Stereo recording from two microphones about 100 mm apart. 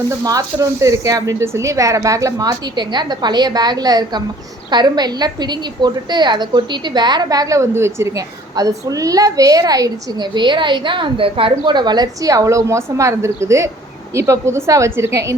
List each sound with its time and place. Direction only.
0.1 s a woman's voice: 35° right (ahead or behind)